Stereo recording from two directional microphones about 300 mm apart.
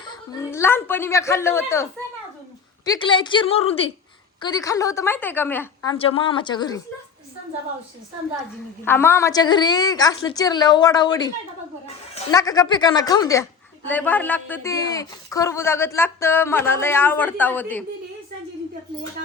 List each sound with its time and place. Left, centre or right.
0.0 s a woman's voice: centre
8.8 s a woman's voice: centre